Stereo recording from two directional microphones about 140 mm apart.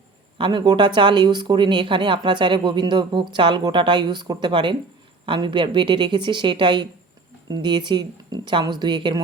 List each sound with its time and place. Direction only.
0.3 s speech: 35° right (ahead or behind)